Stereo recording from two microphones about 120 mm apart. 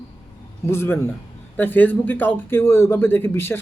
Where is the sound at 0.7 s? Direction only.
20° left (ahead or behind).